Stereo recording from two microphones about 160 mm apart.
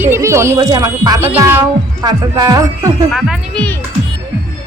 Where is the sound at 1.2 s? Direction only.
15° right (ahead or behind).